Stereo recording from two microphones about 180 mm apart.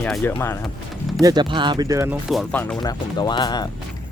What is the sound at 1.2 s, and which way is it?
Speech, 20° right (ahead or behind).